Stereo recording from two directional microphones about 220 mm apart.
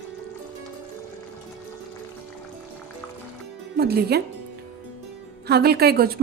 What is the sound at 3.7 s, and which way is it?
Speech, 45° right (ahead or behind).